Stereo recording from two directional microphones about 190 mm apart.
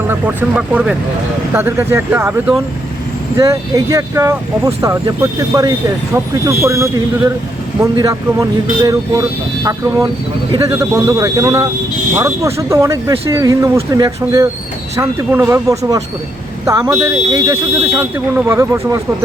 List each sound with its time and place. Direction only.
0.1 s speech: 10° right (ahead or behind)
7.9 s speech: 20° right (ahead or behind)
15.4 s speech: 15° right (ahead or behind)